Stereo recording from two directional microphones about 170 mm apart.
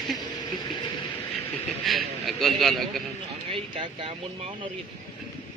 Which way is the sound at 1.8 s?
Centre (ahead or behind).